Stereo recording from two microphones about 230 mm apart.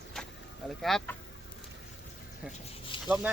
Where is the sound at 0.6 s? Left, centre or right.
Centre.